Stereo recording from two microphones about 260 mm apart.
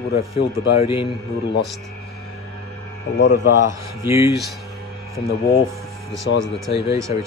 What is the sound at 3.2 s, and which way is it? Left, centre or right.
Speech, left.